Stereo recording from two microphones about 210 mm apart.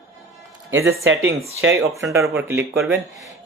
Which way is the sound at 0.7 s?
70° right (ahead or behind).